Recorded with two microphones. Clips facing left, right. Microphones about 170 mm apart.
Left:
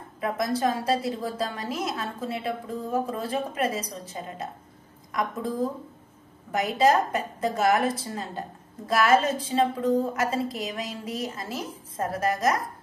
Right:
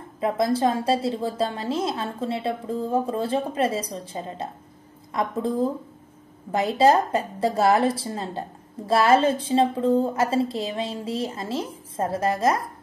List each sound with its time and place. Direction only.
0.2 s a woman's voice: 25° right (ahead or behind)